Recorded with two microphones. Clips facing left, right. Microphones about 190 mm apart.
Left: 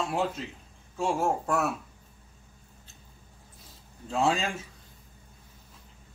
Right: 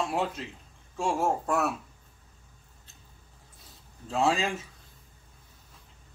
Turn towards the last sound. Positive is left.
turn(degrees=0)  # may be behind; listen again after turning